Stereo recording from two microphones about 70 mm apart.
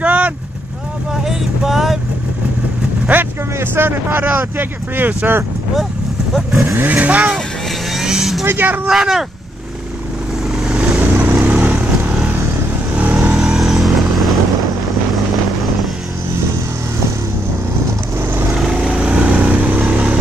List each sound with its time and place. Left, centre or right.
0.0 s vehicle: right
1.2 s vehicle: centre
3.1 s speech: right
6.6 s speech: right
6.9 s speech: right
7.3 s vehicle: centre
8.5 s speech: right
8.8 s speech: centre
10.6 s vehicle: centre
11.0 s vehicle: right
13.0 s vehicle: right
13.4 s vehicle: centre
18.1 s vehicle: right
18.7 s vehicle: centre